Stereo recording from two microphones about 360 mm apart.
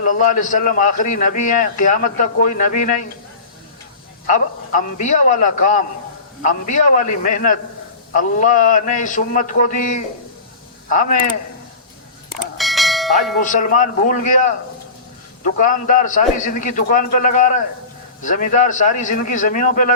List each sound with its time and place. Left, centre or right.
0.0 s a man's voice: left
4.3 s a man's voice: left
12.3 s bell: centre
13.4 s a man's voice: left